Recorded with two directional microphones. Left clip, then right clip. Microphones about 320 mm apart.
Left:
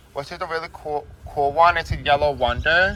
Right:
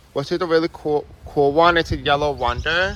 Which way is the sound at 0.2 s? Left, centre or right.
Right.